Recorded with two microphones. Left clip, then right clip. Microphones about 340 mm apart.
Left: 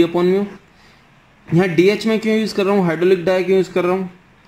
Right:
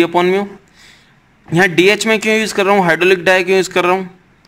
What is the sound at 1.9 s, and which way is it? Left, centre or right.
Speech, right.